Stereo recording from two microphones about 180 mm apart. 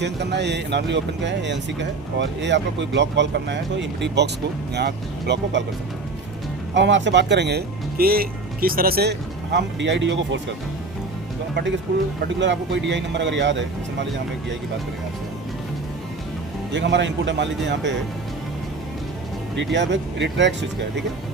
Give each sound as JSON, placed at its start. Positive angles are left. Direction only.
{"t": 0.0, "sound": "speech", "side_deg": -75}
{"t": 6.7, "sound": "speech", "side_deg": -85}
{"t": 12.4, "sound": "speech", "side_deg": -80}
{"t": 16.7, "sound": "speech", "side_deg": -80}
{"t": 19.7, "sound": "speech", "side_deg": -80}